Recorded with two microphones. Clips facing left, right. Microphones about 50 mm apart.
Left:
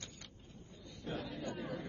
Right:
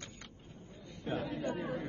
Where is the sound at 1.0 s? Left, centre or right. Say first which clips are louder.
Right 6 dB; right.